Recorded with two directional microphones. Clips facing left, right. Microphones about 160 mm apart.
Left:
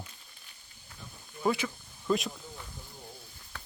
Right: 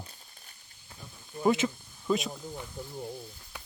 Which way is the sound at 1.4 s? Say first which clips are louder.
Right 4 dB; 20° right (ahead or behind).